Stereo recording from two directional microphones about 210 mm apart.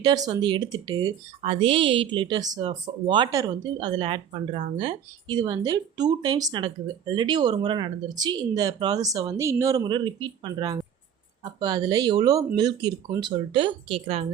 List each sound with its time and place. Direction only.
0.0 s speech: 20° right (ahead or behind)